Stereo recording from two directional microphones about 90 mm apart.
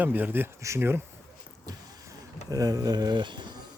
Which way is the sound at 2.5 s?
40° right (ahead or behind).